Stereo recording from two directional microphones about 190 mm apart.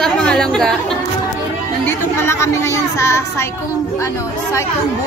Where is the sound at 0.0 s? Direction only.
5° left (ahead or behind).